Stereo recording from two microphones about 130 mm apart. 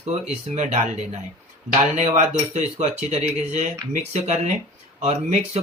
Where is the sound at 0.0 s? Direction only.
55° right (ahead or behind).